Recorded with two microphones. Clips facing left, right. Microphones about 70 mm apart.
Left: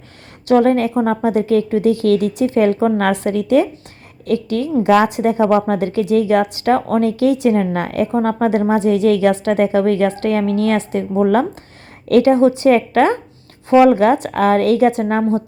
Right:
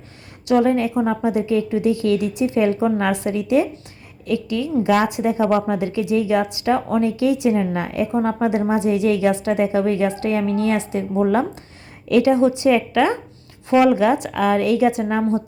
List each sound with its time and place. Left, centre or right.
0.4 s a woman's voice: left
12.0 s speech: left